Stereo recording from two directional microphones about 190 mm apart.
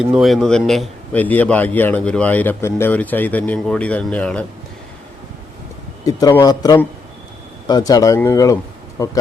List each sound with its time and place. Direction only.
0.0 s a man's voice: centre (ahead or behind)
6.1 s speech: 20° left (ahead or behind)